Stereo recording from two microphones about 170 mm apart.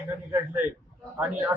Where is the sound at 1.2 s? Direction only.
15° right (ahead or behind).